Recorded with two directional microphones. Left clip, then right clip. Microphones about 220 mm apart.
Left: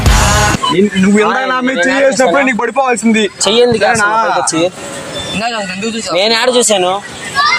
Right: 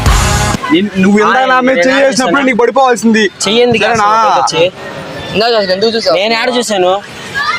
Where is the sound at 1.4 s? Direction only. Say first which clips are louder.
Right 5 dB; 15° left (ahead or behind).